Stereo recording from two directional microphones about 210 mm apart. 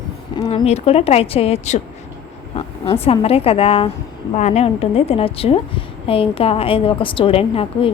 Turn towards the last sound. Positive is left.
turn(degrees=25)  # may be behind; listen again after turning